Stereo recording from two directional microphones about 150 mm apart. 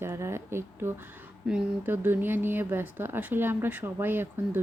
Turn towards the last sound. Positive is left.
turn(degrees=-15)  # may be behind; listen again after turning